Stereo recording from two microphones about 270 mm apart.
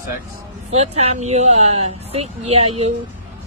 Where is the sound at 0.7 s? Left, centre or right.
Right.